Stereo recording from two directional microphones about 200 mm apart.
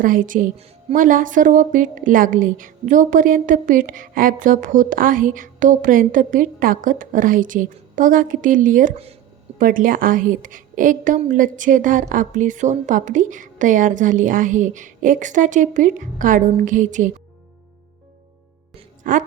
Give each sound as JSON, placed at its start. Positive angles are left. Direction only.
{"t": 0.0, "sound": "speech", "side_deg": -40}
{"t": 19.1, "sound": "a woman's voice", "side_deg": -45}